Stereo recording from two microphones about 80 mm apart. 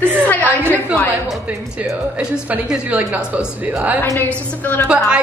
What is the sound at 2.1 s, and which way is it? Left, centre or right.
A woman's voice, centre.